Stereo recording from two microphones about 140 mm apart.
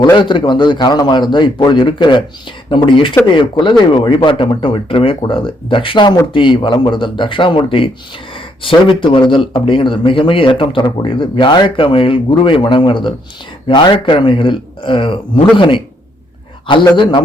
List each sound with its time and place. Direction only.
0.0 s speech: 35° left (ahead or behind)